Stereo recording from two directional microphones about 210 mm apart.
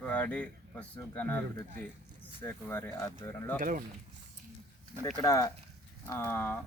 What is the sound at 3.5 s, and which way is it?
Speech, 40° right (ahead or behind).